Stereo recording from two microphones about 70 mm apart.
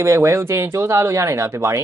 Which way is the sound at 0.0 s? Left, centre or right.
Right.